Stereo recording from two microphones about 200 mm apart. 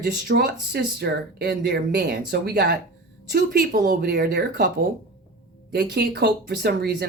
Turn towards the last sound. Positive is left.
turn(degrees=-55)  # may be behind; listen again after turning